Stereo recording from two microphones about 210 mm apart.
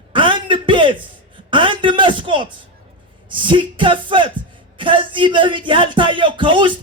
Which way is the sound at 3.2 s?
25° right (ahead or behind).